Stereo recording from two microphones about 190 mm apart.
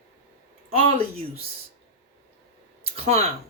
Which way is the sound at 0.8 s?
30° right (ahead or behind).